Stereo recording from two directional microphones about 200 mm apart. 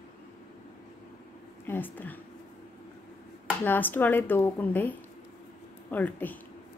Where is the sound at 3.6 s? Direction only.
10° left (ahead or behind).